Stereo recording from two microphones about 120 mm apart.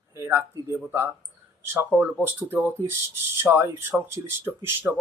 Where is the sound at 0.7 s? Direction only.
15° right (ahead or behind).